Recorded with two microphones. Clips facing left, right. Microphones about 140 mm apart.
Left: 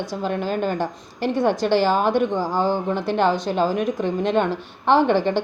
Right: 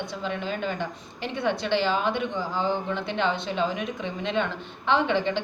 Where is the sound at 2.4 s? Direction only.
80° left.